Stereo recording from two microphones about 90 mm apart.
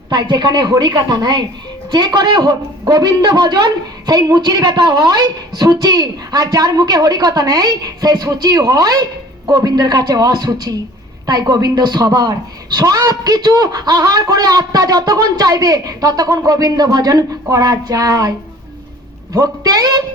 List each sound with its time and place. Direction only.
0.1 s a woman's voice: 55° right (ahead or behind)